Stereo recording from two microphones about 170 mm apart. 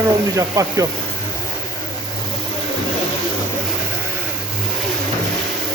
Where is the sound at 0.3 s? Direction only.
20° right (ahead or behind).